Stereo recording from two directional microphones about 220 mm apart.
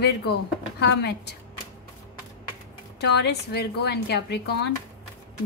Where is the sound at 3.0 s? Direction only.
50° left (ahead or behind).